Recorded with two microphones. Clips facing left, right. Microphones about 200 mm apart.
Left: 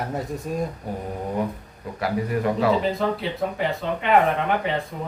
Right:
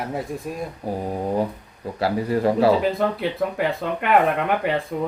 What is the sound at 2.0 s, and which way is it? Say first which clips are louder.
Speech: right 3 dB; 30° right (ahead or behind).